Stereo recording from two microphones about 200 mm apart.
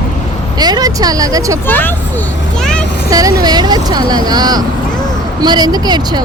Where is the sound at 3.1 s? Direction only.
20° right (ahead or behind).